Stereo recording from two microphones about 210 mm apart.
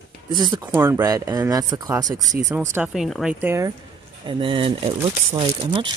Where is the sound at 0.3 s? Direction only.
20° right (ahead or behind).